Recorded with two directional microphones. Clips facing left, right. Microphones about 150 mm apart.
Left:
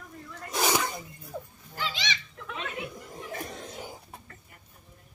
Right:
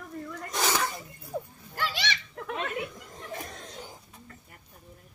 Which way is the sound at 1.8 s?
60° right (ahead or behind).